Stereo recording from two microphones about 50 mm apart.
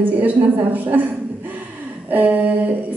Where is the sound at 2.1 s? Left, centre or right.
Right.